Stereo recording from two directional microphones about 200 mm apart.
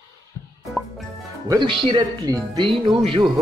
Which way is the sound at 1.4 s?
20° right (ahead or behind).